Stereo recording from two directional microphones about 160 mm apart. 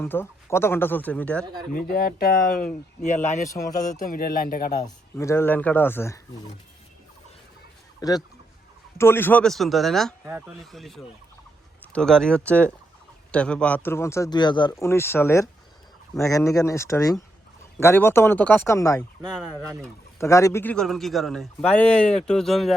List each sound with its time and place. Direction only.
0.0 s speech: 15° left (ahead or behind)
1.7 s speech: 60° left (ahead or behind)
3.1 s speech: 50° left (ahead or behind)
4.0 s speech: 60° left (ahead or behind)
4.7 s speech: 20° left (ahead or behind)
8.0 s a man's voice: 25° left (ahead or behind); by 10.2 s centre (ahead or behind)
10.2 s speech: 10° right (ahead or behind)
10.6 s a man's voice: centre (ahead or behind); by 14.8 s 25° left (ahead or behind)
14.8 s speech: 15° left (ahead or behind)
20.1 s a man's voice: 20° left (ahead or behind); by 22.7 s centre (ahead or behind)